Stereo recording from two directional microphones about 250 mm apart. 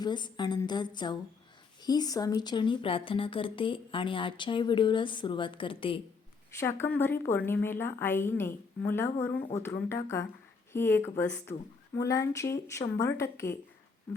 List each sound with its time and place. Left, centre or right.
0.0 s a woman's voice: centre